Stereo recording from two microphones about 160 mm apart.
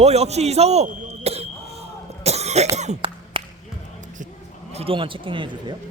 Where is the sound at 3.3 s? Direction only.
35° right (ahead or behind).